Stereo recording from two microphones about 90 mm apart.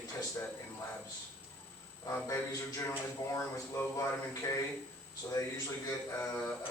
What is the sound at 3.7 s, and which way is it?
Speech, 30° left (ahead or behind).